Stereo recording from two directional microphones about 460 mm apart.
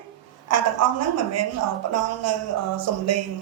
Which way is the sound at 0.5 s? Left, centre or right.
Right.